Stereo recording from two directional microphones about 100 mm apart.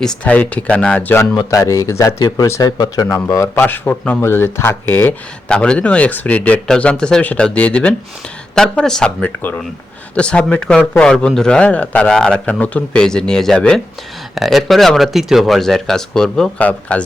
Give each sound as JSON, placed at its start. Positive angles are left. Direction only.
{"t": 0.3, "sound": "a man's voice", "side_deg": 15}
{"t": 1.5, "sound": "speech", "side_deg": 35}
{"t": 3.5, "sound": "speech", "side_deg": 20}
{"t": 5.5, "sound": "a man's voice", "side_deg": 10}